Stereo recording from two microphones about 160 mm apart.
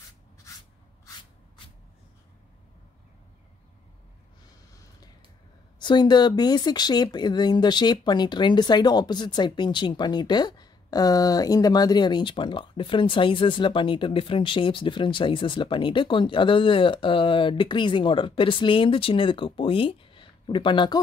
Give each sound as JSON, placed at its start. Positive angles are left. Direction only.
{"t": 5.8, "sound": "speech", "side_deg": 30}